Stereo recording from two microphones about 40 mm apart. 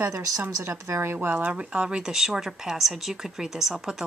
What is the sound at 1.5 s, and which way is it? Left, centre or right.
Speech, right.